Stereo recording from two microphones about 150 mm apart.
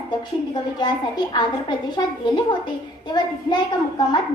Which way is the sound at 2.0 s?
30° left (ahead or behind).